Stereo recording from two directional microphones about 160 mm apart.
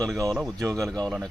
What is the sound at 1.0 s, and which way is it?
Speech, 5° left (ahead or behind).